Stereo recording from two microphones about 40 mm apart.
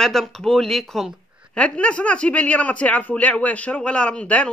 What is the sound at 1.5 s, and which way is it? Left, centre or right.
Speech, left.